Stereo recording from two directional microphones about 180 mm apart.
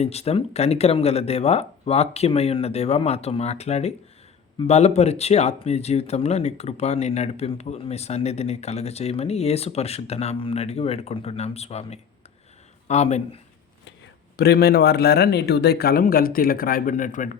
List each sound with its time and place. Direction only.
0.0 s speech: 35° left (ahead or behind)
14.3 s speech: 60° left (ahead or behind); by 17.3 s 45° left (ahead or behind)